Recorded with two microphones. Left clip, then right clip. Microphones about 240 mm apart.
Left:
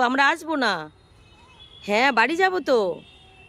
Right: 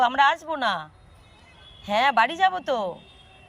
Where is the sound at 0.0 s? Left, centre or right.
Left.